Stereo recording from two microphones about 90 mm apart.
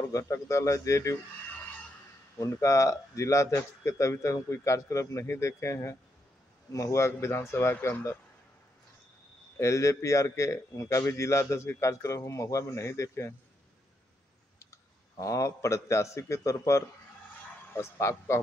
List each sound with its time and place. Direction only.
0.1 s a man's voice: 35° left (ahead or behind)
2.3 s a man's voice: 35° left (ahead or behind)
9.6 s a man's voice: 35° left (ahead or behind)
14.6 s a man's voice: 35° left (ahead or behind)